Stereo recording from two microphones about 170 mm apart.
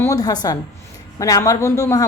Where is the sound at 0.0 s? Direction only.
20° left (ahead or behind).